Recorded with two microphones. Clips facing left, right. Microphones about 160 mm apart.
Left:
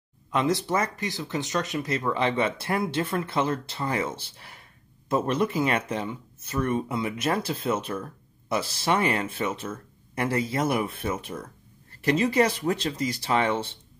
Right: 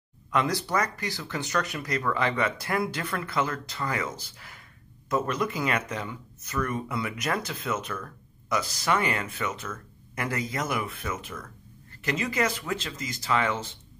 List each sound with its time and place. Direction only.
0.3 s speech: 25° left (ahead or behind)